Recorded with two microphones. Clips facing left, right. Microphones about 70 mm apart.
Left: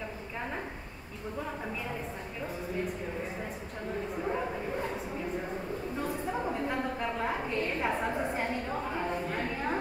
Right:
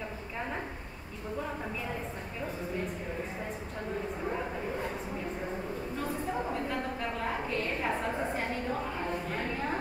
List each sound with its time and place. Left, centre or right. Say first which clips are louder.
6.7 s a woman's voice: left 2 dB; centre